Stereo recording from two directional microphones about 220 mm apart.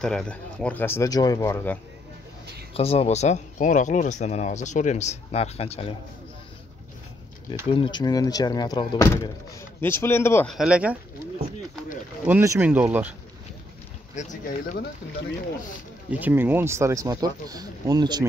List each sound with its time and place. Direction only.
0.0 s speech: 5° left (ahead or behind)
2.7 s speech: 25° left (ahead or behind)
7.7 s speech: 20° left (ahead or behind)
10.5 s speech: 5° right (ahead or behind)
12.3 s speech: 10° right (ahead or behind)
14.1 s speech: 35° left (ahead or behind)
16.1 s speech: 10° right (ahead or behind)